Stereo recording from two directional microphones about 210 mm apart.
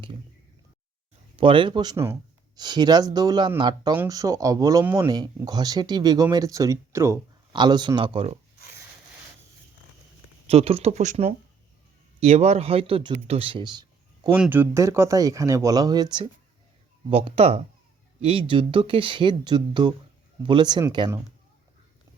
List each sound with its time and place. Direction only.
1.4 s speech: 25° right (ahead or behind)
10.4 s speech: 30° right (ahead or behind)
14.3 s speech: 5° right (ahead or behind)